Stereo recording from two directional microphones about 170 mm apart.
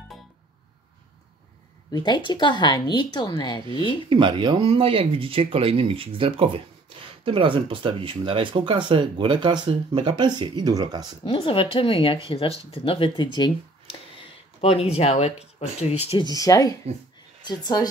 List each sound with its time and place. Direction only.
1.9 s speech: 25° left (ahead or behind)
4.1 s speech: 30° right (ahead or behind)
11.2 s speech: 30° left (ahead or behind)
16.3 s speech: 20° left (ahead or behind)